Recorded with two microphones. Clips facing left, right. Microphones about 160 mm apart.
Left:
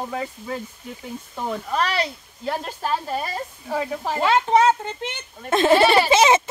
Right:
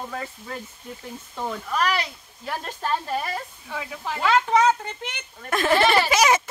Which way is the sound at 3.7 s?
40° left (ahead or behind).